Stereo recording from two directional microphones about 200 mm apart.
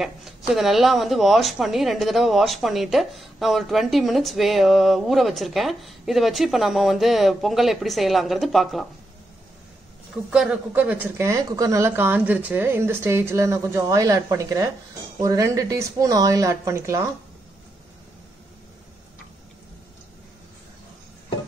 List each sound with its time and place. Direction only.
0.0 s a woman's voice: centre (ahead or behind)
10.1 s speech: 5° right (ahead or behind)